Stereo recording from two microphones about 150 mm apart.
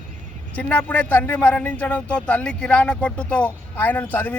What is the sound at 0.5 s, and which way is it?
A man's voice, 10° left (ahead or behind).